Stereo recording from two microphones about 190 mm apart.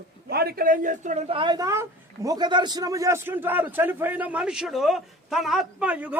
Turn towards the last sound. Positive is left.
turn(degrees=-5)  # may be behind; listen again after turning